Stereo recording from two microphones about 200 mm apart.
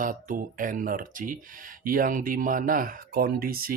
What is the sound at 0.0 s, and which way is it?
Speech, 40° right (ahead or behind).